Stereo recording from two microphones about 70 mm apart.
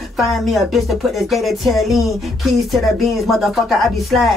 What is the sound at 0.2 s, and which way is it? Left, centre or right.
Speech, centre.